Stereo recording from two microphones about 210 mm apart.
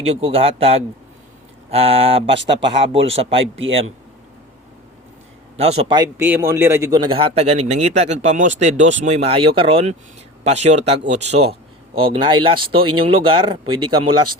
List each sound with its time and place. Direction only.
0.0 s speech: 30° right (ahead or behind)
5.5 s speech: 30° right (ahead or behind)